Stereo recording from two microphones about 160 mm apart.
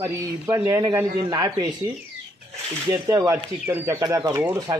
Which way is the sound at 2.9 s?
20° right (ahead or behind).